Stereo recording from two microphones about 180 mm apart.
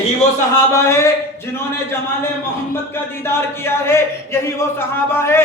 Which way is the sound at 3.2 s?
15° left (ahead or behind).